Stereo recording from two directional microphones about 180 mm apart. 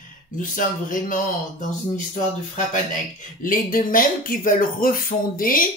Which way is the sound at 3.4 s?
50° left (ahead or behind).